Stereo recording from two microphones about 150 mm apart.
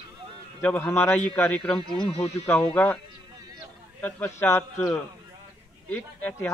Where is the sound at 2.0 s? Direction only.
45° left (ahead or behind).